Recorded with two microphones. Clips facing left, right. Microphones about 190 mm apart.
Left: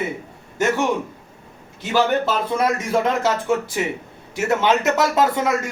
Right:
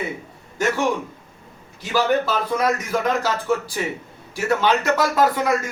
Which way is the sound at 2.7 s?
25° left (ahead or behind).